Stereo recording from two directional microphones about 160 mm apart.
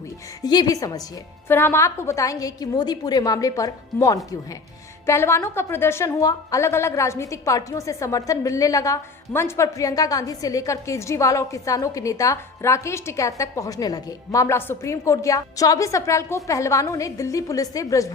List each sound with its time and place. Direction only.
0.4 s a woman's voice: 25° left (ahead or behind)